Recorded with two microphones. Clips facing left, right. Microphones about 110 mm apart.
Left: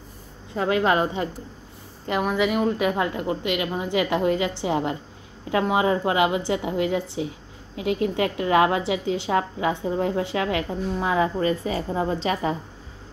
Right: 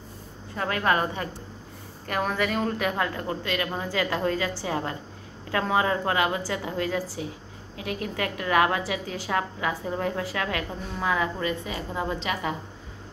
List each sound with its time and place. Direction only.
0.6 s a woman's voice: 20° left (ahead or behind)
11.3 s a woman's voice: 35° left (ahead or behind)